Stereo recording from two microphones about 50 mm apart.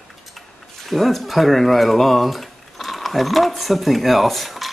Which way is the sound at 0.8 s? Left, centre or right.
Centre.